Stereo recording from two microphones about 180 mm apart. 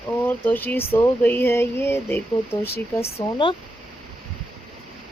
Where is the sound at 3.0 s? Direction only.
25° left (ahead or behind).